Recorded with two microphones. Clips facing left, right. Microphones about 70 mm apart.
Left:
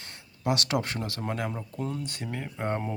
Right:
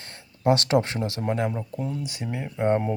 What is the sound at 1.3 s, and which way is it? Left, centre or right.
Speech, centre.